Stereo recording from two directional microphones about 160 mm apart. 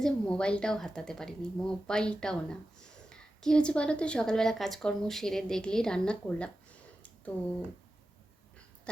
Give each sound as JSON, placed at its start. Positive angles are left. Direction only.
{"t": 0.0, "sound": "a woman's voice", "side_deg": 5}